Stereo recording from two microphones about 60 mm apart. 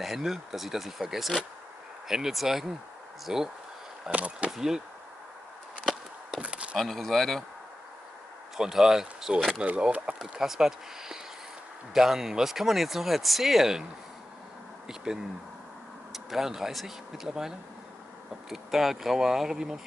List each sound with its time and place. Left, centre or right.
0.0 s speech: centre
4.1 s speech: right
4.5 s speech: centre
6.4 s a sound: centre
6.8 s speech: centre
8.5 s speech: centre
16.1 s speech: centre